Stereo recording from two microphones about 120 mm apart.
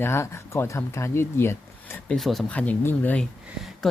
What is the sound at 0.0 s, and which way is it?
Speech, 20° left (ahead or behind).